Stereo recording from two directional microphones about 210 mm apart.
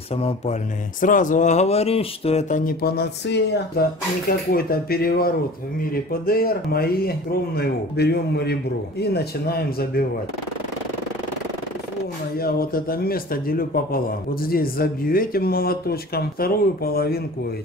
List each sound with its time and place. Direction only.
0.1 s speech: 30° left (ahead or behind)
1.0 s speech: 40° left (ahead or behind)
12.4 s speech: 45° left (ahead or behind)